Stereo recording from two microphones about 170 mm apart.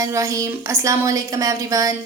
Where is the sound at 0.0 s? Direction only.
20° right (ahead or behind).